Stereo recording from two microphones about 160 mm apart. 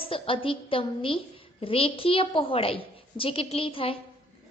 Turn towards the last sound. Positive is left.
turn(degrees=35)  # may be behind; listen again after turning